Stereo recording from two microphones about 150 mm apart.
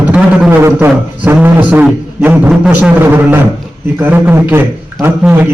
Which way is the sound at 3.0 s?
15° right (ahead or behind).